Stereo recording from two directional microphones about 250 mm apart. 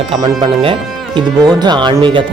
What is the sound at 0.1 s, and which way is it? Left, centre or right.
Speech, centre.